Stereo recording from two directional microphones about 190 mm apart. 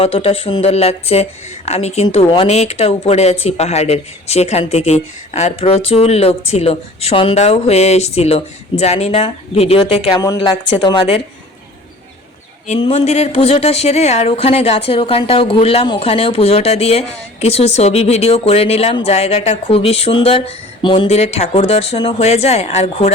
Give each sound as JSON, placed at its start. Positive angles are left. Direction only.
{"t": 0.0, "sound": "a woman's voice", "side_deg": 30}
{"t": 12.8, "sound": "speech", "side_deg": 35}